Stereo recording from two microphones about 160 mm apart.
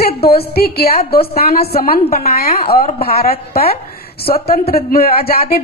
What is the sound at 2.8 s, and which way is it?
Speech, 40° left (ahead or behind).